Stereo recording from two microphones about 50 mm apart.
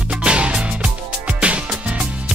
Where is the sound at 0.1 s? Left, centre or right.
Centre.